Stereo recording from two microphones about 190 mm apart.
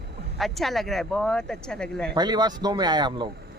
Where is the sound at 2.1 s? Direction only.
20° right (ahead or behind).